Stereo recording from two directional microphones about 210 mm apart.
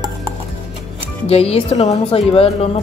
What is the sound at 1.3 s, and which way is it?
Speech, 30° left (ahead or behind).